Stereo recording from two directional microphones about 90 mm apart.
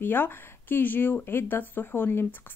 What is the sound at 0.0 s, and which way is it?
Speech, 25° left (ahead or behind).